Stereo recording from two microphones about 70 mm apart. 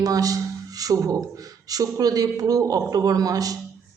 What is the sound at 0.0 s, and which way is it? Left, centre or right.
A woman's voice, right.